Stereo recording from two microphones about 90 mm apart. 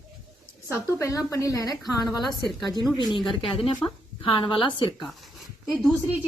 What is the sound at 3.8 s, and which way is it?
Speech, 30° left (ahead or behind).